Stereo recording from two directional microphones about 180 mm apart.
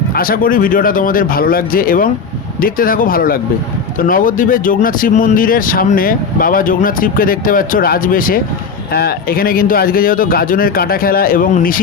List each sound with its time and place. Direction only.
0.1 s speech: 50° left (ahead or behind)